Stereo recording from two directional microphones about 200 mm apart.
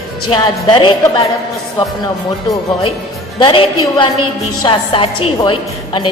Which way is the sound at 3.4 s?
25° left (ahead or behind).